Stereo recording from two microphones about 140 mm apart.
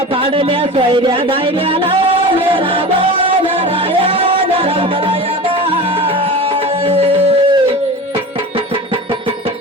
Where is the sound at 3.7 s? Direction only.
40° right (ahead or behind).